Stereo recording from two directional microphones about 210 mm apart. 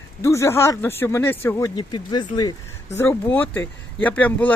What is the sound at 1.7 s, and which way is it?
Speech, 20° left (ahead or behind).